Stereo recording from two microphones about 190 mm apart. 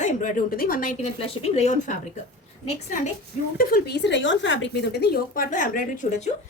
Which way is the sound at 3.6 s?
50° left (ahead or behind).